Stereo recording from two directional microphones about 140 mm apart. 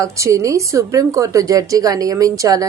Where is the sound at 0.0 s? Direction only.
20° right (ahead or behind).